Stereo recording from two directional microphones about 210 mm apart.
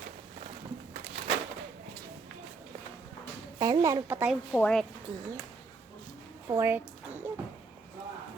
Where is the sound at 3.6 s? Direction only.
20° right (ahead or behind).